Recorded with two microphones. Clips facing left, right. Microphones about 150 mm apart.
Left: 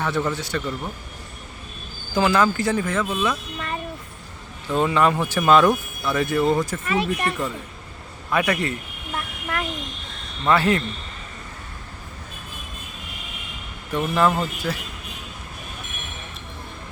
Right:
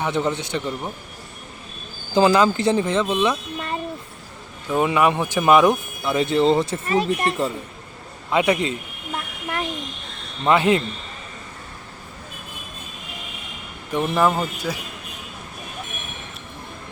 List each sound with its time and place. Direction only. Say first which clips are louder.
0.0 s speech: right 2 dB; 20° right (ahead or behind)
2.1 s speech: right 3 dB; 20° right (ahead or behind)
4.7 s speech: right 1 dB; 15° right (ahead or behind)
6.9 s speech: right 3 dB; 40° right (ahead or behind)
8.3 s speech: right 3 dB; 20° right (ahead or behind)
10.4 s speech: right 2 dB; 20° right (ahead or behind)
13.9 s speech: right 1 dB; 20° right (ahead or behind)